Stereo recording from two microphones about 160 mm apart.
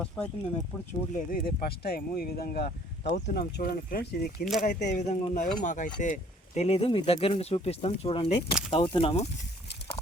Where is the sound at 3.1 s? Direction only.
90° left; by 4.5 s 70° left (ahead or behind).